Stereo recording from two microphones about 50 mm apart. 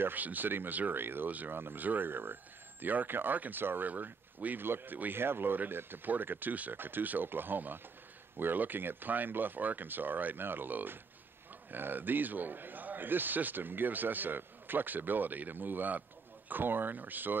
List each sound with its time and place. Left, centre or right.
0.0 s a man's voice: right